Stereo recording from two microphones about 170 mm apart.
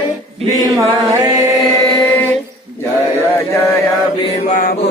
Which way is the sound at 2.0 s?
10° left (ahead or behind).